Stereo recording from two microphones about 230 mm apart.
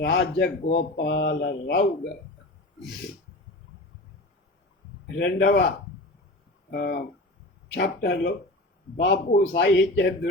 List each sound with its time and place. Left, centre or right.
0.0 s speech: left
5.1 s a man's voice: left
6.7 s a man's voice: left